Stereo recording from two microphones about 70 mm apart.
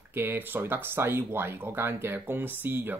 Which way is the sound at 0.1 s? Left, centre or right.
Right.